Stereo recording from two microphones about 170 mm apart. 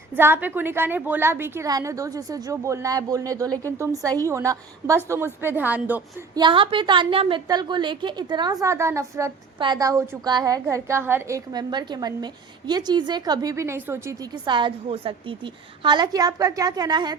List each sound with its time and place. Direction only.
0.2 s a woman's voice: 10° right (ahead or behind)
6.3 s a woman's voice: 30° right (ahead or behind)